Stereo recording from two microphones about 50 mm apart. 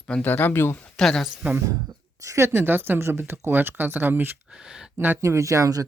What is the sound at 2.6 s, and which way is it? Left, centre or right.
Speech, right.